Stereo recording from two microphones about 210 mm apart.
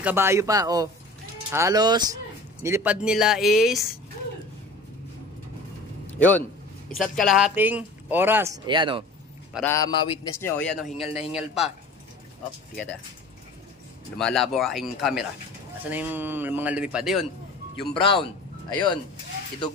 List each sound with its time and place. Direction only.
0.0 s speech: 10° right (ahead or behind)
6.0 s a sound: 10° left (ahead or behind)
7.0 s speech: centre (ahead or behind)
8.6 s speech: 25° right (ahead or behind)
9.7 s a man's voice: 20° left (ahead or behind)
10.4 s speech: 5° left (ahead or behind)
14.1 s speech: centre (ahead or behind)
17.9 s a man's voice: 25° left (ahead or behind)